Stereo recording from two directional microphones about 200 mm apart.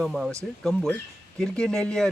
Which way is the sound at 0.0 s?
Centre (ahead or behind).